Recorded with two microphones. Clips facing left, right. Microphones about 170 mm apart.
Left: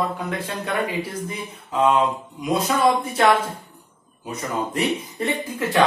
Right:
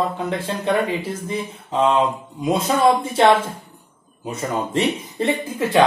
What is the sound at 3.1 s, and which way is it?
Speech, 25° right (ahead or behind).